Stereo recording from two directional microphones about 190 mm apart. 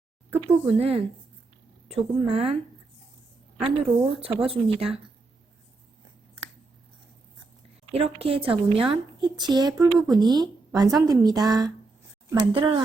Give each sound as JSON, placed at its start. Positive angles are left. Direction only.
{"t": 0.3, "sound": "speech", "side_deg": -10}
{"t": 0.8, "sound": "speech", "side_deg": -30}
{"t": 4.2, "sound": "speech", "side_deg": -30}
{"t": 7.9, "sound": "a woman's voice", "side_deg": -30}